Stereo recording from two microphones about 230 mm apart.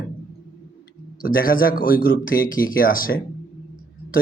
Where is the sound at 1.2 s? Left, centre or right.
Left.